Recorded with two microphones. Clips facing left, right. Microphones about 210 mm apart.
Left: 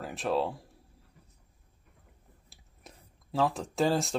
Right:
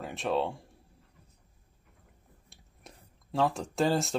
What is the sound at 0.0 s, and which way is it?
Speech, centre (ahead or behind).